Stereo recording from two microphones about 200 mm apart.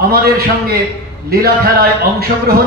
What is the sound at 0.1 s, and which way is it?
A man's voice, 50° right (ahead or behind).